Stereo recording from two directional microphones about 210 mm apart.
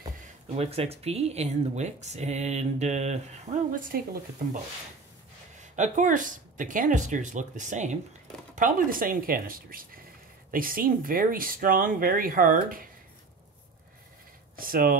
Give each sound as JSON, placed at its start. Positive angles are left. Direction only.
{"t": 0.6, "sound": "speech", "side_deg": -30}
{"t": 3.9, "sound": "speech", "side_deg": -45}
{"t": 5.6, "sound": "speech", "side_deg": -35}
{"t": 14.6, "sound": "speech", "side_deg": -45}